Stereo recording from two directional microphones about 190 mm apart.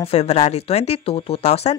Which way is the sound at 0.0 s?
35° left (ahead or behind).